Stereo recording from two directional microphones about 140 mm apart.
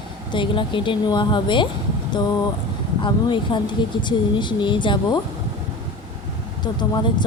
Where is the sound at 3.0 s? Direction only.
35° left (ahead or behind).